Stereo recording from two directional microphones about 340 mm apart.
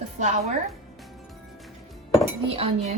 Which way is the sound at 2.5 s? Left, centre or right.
Centre.